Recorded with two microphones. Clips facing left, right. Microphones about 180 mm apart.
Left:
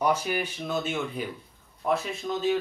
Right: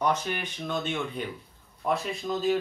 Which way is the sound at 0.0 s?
10° left (ahead or behind).